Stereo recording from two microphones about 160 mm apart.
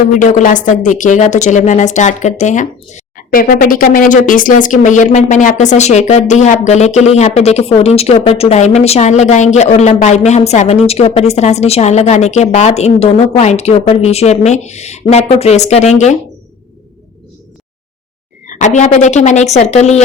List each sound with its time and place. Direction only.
0.1 s speech: 50° left (ahead or behind)
18.4 s speech: 50° left (ahead or behind)